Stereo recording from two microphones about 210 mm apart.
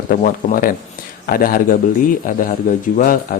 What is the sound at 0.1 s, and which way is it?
A man's voice, 40° left (ahead or behind).